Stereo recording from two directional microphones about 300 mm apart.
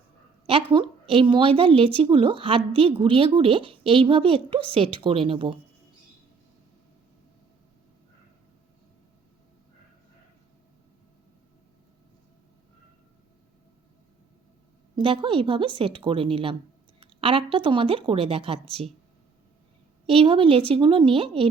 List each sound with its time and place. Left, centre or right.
0.4 s a woman's voice: centre
14.9 s a woman's voice: centre
20.1 s a woman's voice: centre